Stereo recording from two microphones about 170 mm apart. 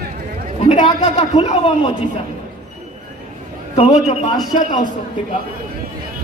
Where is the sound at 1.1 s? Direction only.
45° left (ahead or behind).